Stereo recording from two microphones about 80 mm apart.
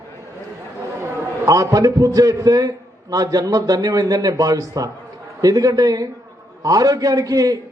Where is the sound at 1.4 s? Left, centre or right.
Right.